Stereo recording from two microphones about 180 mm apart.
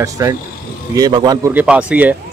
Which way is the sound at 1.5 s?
10° right (ahead or behind).